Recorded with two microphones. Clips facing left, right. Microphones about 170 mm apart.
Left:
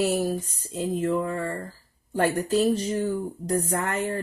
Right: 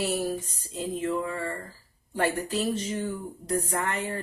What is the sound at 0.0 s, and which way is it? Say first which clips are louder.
Speech: left 4 dB; 45° left (ahead or behind).